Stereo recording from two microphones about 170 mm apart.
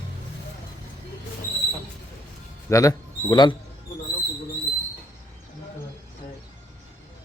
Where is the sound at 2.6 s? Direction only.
20° left (ahead or behind).